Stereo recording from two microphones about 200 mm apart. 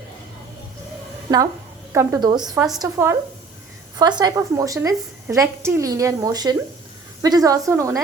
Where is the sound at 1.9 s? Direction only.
15° right (ahead or behind).